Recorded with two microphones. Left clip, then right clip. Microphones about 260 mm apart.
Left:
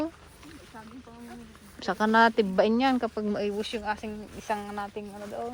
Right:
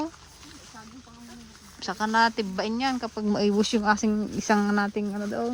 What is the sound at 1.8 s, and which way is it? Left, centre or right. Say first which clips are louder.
Speech: left 1 dB; centre.